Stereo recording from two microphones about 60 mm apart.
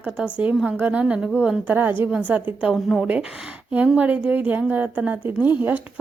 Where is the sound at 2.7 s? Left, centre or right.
Centre.